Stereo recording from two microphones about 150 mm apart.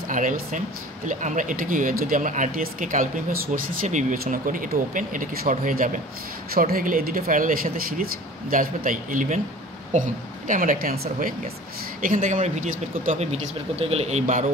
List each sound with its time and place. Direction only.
0.1 s speech: 60° right (ahead or behind)
12.0 s speech: 60° right (ahead or behind)